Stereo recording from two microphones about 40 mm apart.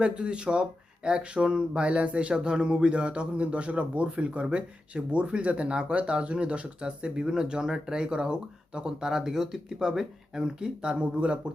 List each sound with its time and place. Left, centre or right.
0.0 s speech: right